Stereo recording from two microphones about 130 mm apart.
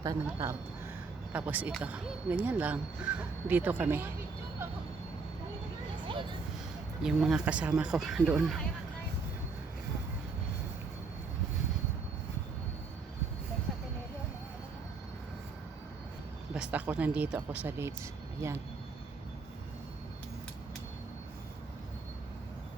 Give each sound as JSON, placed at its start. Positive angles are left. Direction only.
{"t": 0.0, "sound": "speech", "side_deg": -25}
{"t": 1.3, "sound": "speech", "side_deg": -10}
{"t": 7.0, "sound": "speech", "side_deg": -5}
{"t": 16.6, "sound": "speech", "side_deg": -10}